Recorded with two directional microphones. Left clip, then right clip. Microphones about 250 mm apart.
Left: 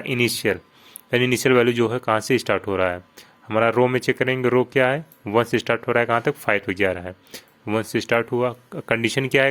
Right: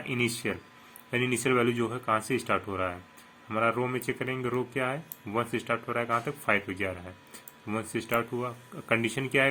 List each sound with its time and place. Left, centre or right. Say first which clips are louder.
0.0 s speech: left 9 dB; left